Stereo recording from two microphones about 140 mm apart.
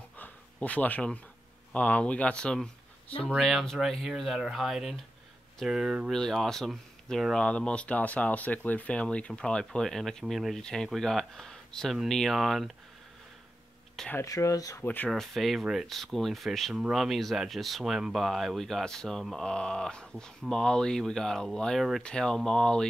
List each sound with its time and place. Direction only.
0.2 s a sound: 10° left (ahead or behind)
1.7 s speech: 10° left (ahead or behind)
14.1 s speech: 25° left (ahead or behind)
14.8 s speech: 15° left (ahead or behind)
15.0 s speech: centre (ahead or behind)